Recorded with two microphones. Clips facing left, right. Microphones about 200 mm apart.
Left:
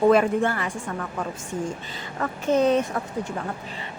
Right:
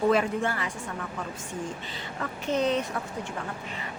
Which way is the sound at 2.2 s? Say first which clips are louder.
Left 6 dB; 45° left (ahead or behind).